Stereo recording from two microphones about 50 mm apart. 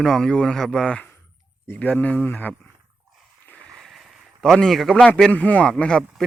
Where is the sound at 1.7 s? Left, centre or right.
Left.